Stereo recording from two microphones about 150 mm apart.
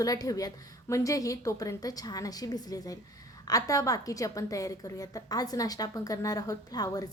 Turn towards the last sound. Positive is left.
turn(degrees=25)  # may be behind; listen again after turning